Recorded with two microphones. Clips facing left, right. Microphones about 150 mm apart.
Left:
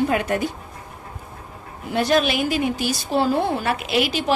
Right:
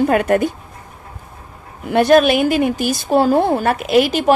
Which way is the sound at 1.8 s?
55° right (ahead or behind).